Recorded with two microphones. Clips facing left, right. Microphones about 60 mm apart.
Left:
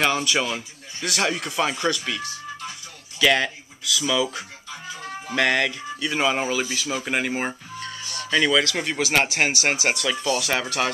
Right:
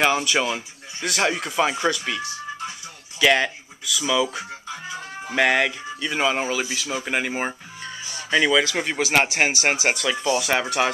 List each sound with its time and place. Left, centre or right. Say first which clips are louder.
0.0 s speech: right 2 dB; centre
10.1 s speech: right 2 dB; centre